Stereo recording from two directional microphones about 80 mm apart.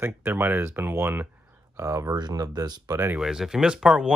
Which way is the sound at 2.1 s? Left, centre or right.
Right.